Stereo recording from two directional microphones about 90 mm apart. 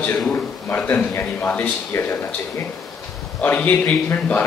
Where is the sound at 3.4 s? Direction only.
20° left (ahead or behind).